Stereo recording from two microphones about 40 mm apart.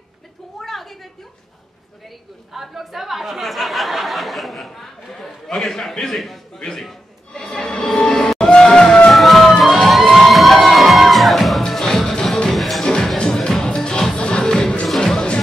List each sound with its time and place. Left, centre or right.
0.6 s a sound: centre
2.5 s a man's voice: centre
7.3 s music: centre
9.1 s music: centre
9.7 s crowd: centre
10.1 s music: centre
12.8 s music: centre